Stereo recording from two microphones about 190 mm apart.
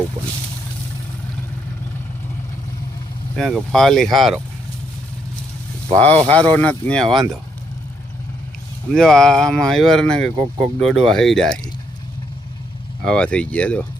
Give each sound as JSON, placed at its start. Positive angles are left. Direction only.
{"t": 3.3, "sound": "speech", "side_deg": 0}
{"t": 6.0, "sound": "speech", "side_deg": 10}
{"t": 8.9, "sound": "speech", "side_deg": 5}
{"t": 10.3, "sound": "speech", "side_deg": -25}
{"t": 11.0, "sound": "speech", "side_deg": 0}
{"t": 13.0, "sound": "speech", "side_deg": 5}